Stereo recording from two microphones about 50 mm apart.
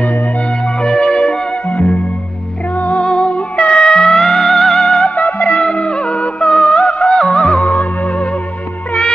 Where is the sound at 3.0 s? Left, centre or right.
Left.